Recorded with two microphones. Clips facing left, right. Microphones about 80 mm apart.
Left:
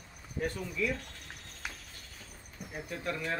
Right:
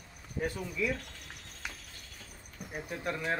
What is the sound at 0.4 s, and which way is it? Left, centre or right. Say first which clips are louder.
Speech: even; centre.